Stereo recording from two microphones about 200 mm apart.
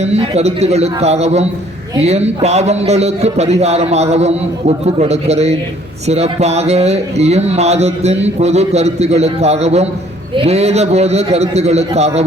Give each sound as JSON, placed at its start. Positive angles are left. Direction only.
{"t": 0.0, "sound": "speech", "side_deg": -30}